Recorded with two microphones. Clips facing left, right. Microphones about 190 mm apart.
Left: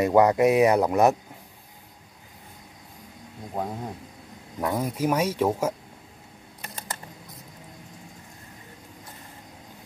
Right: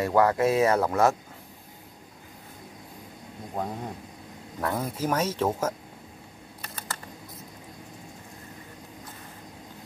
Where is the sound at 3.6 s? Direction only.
5° left (ahead or behind).